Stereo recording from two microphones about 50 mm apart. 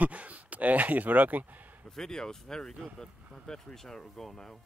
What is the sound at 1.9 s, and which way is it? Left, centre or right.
Speech, centre.